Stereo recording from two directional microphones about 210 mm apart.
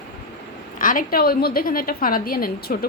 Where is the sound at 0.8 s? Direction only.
40° left (ahead or behind).